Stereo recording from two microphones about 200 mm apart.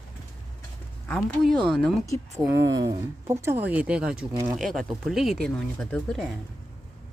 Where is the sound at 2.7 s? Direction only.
20° right (ahead or behind).